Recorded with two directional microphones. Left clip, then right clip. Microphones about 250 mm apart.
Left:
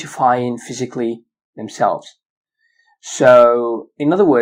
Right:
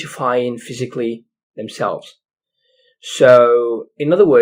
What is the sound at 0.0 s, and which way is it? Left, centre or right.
Speech, centre.